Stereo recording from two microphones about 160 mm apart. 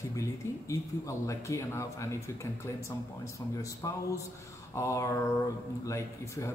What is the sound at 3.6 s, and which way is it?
Speech, 20° left (ahead or behind).